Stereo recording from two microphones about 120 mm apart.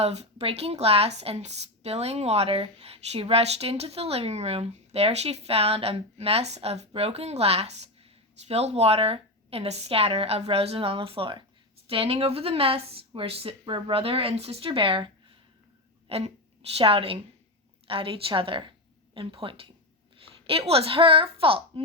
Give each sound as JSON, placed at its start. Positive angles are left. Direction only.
{"t": 0.0, "sound": "speech", "side_deg": -60}
{"t": 16.0, "sound": "speech", "side_deg": -55}